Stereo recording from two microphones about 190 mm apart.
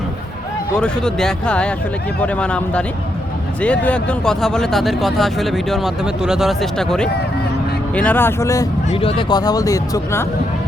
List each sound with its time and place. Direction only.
0.8 s speech: 5° left (ahead or behind)
8.9 s speech: 30° left (ahead or behind)